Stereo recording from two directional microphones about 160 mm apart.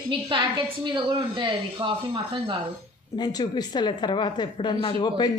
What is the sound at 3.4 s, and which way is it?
A woman's voice, 30° left (ahead or behind).